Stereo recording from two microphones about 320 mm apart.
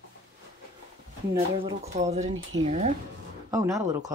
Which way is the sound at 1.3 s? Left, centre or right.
Centre.